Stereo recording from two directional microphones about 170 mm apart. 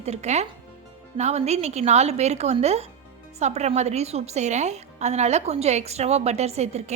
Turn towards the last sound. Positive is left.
turn(degrees=-40)  # may be behind; listen again after turning